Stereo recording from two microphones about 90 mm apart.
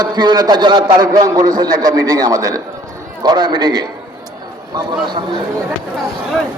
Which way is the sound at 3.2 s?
55° right (ahead or behind).